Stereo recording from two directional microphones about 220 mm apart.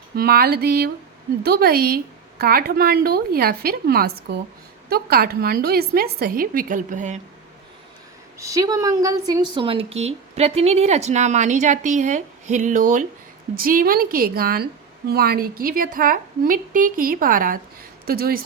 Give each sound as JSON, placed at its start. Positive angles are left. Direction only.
{"t": 0.2, "sound": "speech", "side_deg": -45}
{"t": 8.4, "sound": "a woman's voice", "side_deg": -15}